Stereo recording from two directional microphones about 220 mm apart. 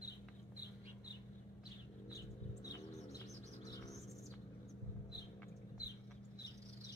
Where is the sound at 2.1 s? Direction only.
15° left (ahead or behind).